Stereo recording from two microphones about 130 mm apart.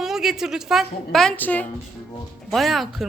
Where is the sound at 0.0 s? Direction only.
Centre (ahead or behind).